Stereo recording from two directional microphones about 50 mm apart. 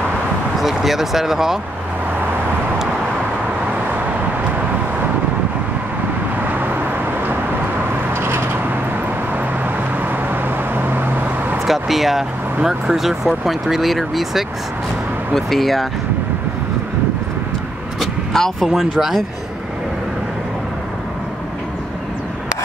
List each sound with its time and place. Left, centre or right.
0.8 s speech: centre
6.4 s vehicle: right
8.1 s a sound: right
10.7 s vehicle: right
11.6 s speech: centre
18.3 s speech: centre
18.7 s speech: centre